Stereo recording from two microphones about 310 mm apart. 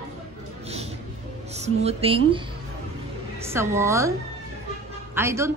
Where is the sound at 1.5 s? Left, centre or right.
Right.